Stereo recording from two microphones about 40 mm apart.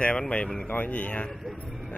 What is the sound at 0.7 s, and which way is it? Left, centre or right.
Speech, left.